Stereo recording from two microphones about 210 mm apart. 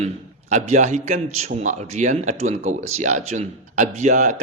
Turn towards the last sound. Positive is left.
turn(degrees=-35)  # may be behind; listen again after turning